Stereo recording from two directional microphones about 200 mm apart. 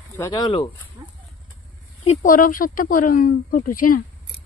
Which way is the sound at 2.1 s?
45° left (ahead or behind).